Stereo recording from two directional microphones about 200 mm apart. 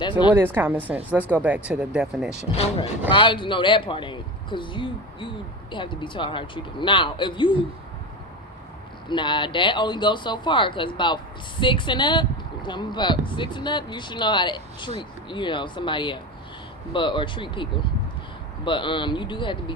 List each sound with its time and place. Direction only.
0.0 s speech: 20° left (ahead or behind)
0.3 s a woman's voice: 10° right (ahead or behind)
2.5 s speech: 30° left (ahead or behind)
9.0 s speech: 25° left (ahead or behind)